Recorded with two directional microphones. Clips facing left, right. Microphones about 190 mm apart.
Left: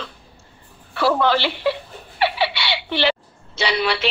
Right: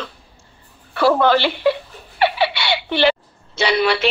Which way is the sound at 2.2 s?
50° right (ahead or behind).